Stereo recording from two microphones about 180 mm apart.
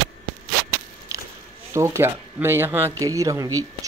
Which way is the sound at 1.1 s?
20° right (ahead or behind).